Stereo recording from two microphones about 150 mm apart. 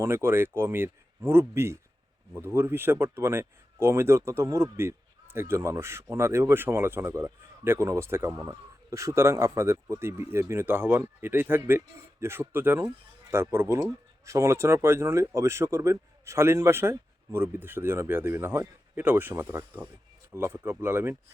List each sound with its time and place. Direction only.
0.0 s speech: 15° right (ahead or behind)